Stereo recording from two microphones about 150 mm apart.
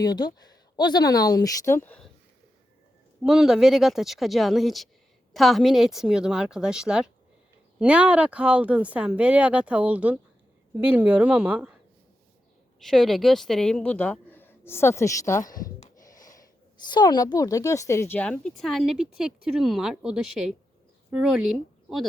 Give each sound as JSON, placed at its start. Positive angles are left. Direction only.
{"t": 0.0, "sound": "speech", "side_deg": 25}
{"t": 3.2, "sound": "a woman's voice", "side_deg": -5}
{"t": 12.8, "sound": "speech", "side_deg": 0}
{"t": 15.4, "sound": "a sound", "side_deg": 65}
{"t": 16.3, "sound": "a woman's voice", "side_deg": 30}